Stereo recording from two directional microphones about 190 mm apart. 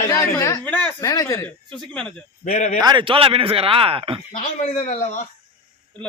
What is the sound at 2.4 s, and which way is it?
Speech, 35° left (ahead or behind).